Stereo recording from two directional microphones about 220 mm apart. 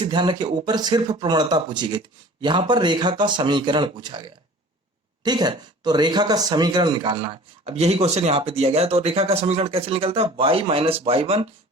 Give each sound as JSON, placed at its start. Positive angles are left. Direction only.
{"t": 0.0, "sound": "speech", "side_deg": -20}